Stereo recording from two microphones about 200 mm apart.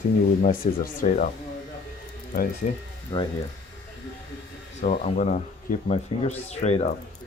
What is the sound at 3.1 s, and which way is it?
Speech, 20° left (ahead or behind).